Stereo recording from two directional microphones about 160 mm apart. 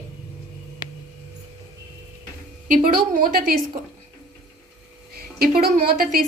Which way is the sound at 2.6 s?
55° right (ahead or behind).